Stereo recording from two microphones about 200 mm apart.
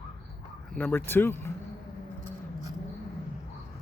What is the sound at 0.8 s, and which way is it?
Speech, 10° left (ahead or behind).